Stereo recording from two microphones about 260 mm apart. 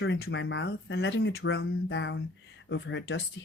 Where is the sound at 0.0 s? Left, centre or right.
Left.